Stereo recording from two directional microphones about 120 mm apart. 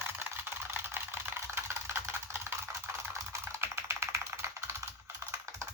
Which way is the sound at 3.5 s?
20° right (ahead or behind).